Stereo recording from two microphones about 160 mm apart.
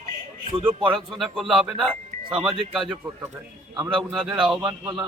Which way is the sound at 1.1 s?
Centre (ahead or behind).